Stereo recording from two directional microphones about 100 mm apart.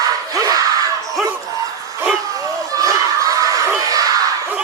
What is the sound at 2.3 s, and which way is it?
Crowd, 35° right (ahead or behind).